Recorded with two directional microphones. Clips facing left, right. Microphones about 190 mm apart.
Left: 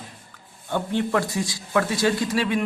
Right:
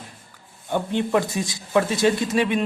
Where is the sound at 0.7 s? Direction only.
20° right (ahead or behind).